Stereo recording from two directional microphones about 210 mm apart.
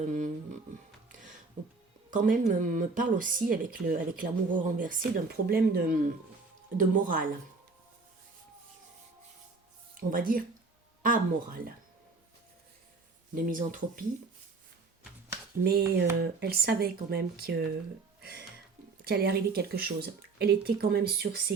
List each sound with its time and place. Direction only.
2.0 s speech: 40° right (ahead or behind)
10.0 s speech: 40° right (ahead or behind)
13.3 s speech: 40° right (ahead or behind)
15.6 s speech: 50° right (ahead or behind)
18.2 s music: 50° right (ahead or behind)
19.0 s speech: 50° right (ahead or behind)